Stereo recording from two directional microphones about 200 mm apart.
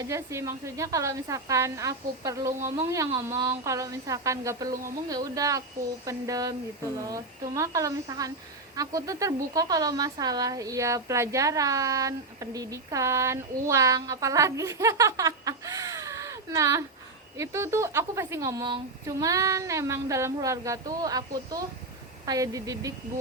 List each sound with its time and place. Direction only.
0.0 s speech: 15° right (ahead or behind)